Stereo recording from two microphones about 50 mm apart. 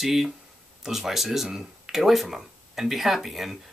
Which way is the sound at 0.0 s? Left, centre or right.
Centre.